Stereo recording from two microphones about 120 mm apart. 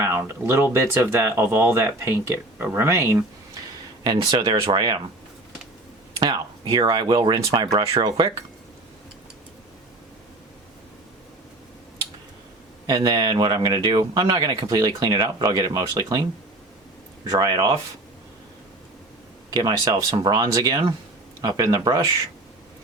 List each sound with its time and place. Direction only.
0.0 s speech: 25° right (ahead or behind)
4.0 s speech: 40° right (ahead or behind)
6.1 s speech: 35° right (ahead or behind)
12.9 s speech: 30° right (ahead or behind)
17.3 s speech: 35° right (ahead or behind)
19.5 s speech: 30° right (ahead or behind)